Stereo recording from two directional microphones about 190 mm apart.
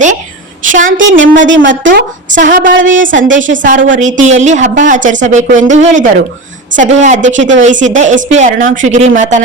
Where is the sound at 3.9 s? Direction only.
40° right (ahead or behind).